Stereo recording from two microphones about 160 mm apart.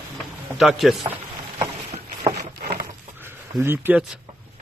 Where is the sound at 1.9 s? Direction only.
40° right (ahead or behind).